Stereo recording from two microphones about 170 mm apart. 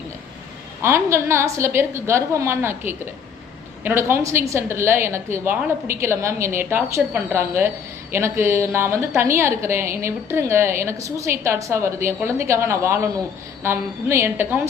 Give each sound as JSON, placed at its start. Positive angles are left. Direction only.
{"t": 0.8, "sound": "a woman's voice", "side_deg": -15}